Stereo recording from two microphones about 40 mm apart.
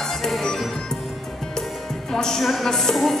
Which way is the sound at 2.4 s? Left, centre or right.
Centre.